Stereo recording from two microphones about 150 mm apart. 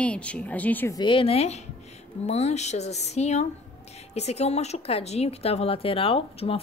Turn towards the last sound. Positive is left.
turn(degrees=40)  # may be behind; listen again after turning